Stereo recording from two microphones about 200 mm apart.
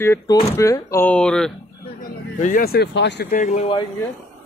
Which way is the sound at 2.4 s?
45° left (ahead or behind).